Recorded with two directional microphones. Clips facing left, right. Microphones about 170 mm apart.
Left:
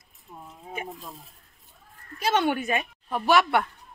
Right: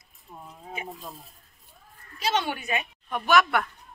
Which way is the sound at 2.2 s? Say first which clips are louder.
Left 4 dB; 50° left (ahead or behind).